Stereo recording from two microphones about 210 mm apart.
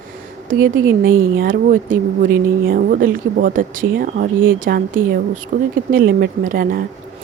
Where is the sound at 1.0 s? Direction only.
45° right (ahead or behind).